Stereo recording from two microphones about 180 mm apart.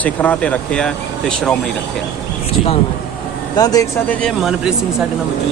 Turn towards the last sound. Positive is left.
turn(degrees=0)  # may be behind; listen again after turning